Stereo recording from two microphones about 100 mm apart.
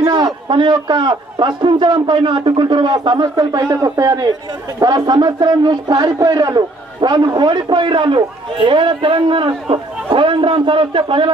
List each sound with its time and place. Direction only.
0.0 s a man's voice: 45° right (ahead or behind); by 11.3 s 60° right (ahead or behind)